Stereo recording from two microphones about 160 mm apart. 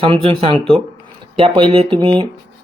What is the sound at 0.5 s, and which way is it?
Speech, 5° left (ahead or behind).